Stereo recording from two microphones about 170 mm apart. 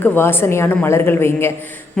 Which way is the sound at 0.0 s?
10° left (ahead or behind).